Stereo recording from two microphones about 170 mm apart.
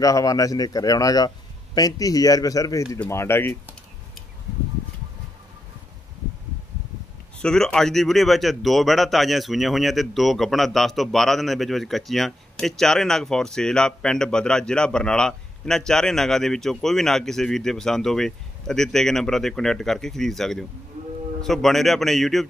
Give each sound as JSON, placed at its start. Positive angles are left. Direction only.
{"t": 0.0, "sound": "speech", "side_deg": 20}
{"t": 7.4, "sound": "speech", "side_deg": 5}